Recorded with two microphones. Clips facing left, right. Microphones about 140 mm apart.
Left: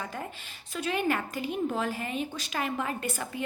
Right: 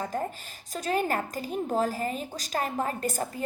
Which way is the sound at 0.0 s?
40° right (ahead or behind).